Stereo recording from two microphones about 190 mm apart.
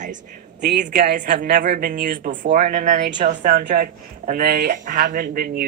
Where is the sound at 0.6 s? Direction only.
50° right (ahead or behind).